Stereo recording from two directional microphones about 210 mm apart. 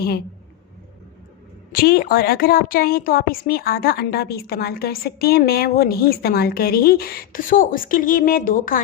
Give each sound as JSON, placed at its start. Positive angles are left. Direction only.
{"t": 1.7, "sound": "a woman's voice", "side_deg": 45}